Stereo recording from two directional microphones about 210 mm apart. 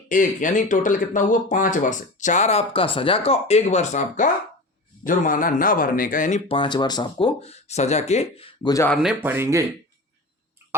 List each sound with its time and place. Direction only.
0.1 s speech: 40° left (ahead or behind)
6.5 s speech: 20° left (ahead or behind)
8.7 s speech: 10° left (ahead or behind)
9.0 s speech: 5° right (ahead or behind)